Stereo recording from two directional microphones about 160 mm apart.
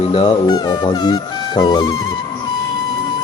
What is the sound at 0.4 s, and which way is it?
Speech, 25° left (ahead or behind).